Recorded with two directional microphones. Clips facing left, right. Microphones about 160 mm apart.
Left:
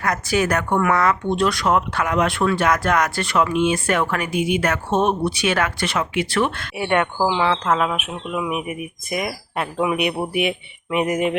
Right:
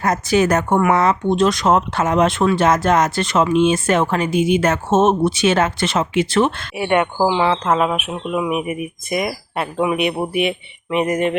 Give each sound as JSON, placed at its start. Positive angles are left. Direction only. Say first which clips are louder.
{"t": 0.0, "sound": "speech", "louder": "right 4 dB", "side_deg": -25}
{"t": 6.7, "sound": "speech", "louder": "right 2 dB", "side_deg": -5}
{"t": 7.9, "sound": "speech", "louder": "right 4 dB", "side_deg": -5}